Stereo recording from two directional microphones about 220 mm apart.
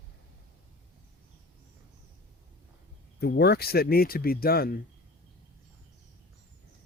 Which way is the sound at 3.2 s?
45° left (ahead or behind).